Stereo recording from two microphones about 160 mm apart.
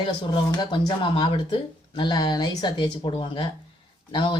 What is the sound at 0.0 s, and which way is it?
Speech, 30° left (ahead or behind).